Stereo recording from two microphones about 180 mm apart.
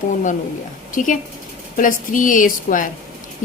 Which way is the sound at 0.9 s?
45° left (ahead or behind).